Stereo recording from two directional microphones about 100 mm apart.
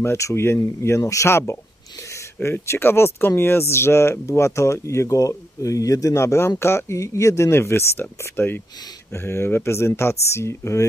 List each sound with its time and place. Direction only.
0.0 s speech: 25° left (ahead or behind)